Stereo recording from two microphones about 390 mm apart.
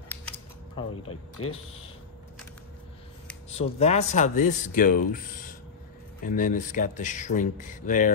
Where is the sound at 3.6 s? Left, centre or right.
Centre.